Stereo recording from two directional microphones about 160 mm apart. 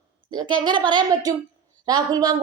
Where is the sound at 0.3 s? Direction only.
30° right (ahead or behind).